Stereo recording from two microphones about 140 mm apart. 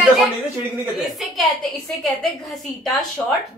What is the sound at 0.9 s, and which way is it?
A woman's voice, centre (ahead or behind).